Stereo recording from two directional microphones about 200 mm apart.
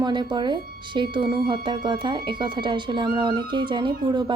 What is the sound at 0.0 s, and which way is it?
Speech, 20° right (ahead or behind).